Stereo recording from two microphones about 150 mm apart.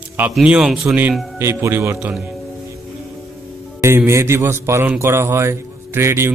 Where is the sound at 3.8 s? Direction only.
15° right (ahead or behind).